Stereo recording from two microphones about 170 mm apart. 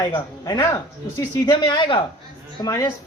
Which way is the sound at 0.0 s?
25° left (ahead or behind).